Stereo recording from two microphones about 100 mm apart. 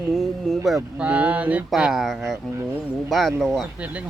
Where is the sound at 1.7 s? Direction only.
5° right (ahead or behind).